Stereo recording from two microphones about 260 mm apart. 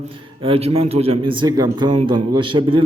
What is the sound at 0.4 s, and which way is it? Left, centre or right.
A man's voice, right.